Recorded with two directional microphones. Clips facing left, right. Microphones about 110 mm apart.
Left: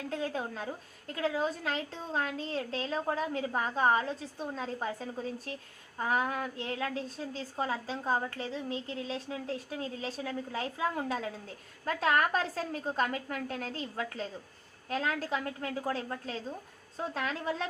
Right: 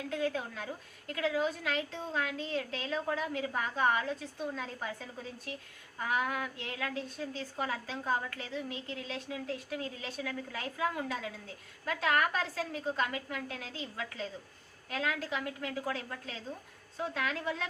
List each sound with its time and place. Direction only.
0.1 s a woman's voice: 35° left (ahead or behind)